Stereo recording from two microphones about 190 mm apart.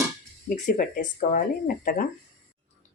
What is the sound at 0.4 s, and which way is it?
Speech, 45° left (ahead or behind).